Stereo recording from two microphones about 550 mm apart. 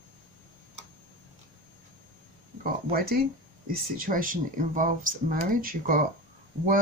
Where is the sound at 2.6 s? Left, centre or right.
Centre.